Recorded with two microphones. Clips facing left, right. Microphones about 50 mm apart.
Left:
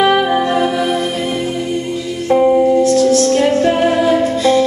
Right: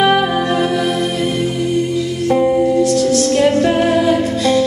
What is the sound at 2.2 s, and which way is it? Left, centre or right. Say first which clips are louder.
Music: left 3 dB; centre.